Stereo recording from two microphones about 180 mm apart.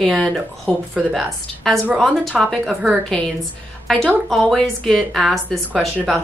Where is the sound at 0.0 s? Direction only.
Centre (ahead or behind).